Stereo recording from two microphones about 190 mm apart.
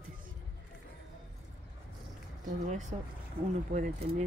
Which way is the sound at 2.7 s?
40° right (ahead or behind).